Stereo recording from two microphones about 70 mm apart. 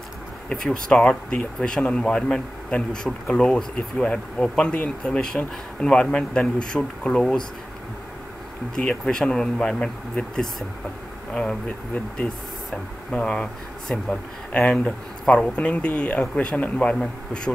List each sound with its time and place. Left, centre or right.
0.5 s speech: centre
8.7 s speech: centre